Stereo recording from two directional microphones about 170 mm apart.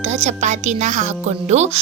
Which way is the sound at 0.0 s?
40° right (ahead or behind).